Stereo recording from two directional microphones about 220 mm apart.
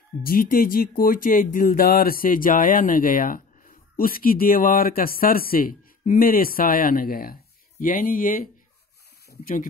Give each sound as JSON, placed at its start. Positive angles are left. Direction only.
{"t": 0.2, "sound": "speech", "side_deg": 40}